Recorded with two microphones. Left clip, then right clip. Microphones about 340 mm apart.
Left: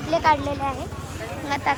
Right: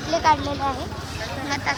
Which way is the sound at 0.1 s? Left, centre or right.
Centre.